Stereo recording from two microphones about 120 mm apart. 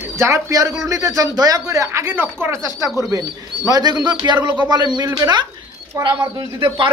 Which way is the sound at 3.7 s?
35° right (ahead or behind).